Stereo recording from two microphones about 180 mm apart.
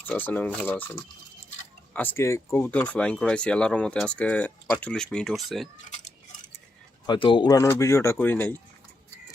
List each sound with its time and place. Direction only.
0.0 s speech: 10° left (ahead or behind)
7.1 s speech: 25° left (ahead or behind); by 8.5 s 10° left (ahead or behind)